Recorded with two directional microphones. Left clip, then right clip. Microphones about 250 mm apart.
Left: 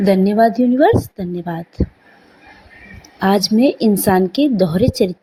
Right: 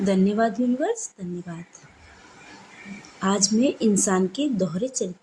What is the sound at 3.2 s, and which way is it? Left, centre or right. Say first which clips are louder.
A woman's voice: left 8 dB; left.